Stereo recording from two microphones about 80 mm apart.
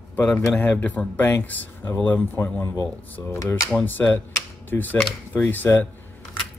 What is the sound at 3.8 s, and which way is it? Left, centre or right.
Speech, left.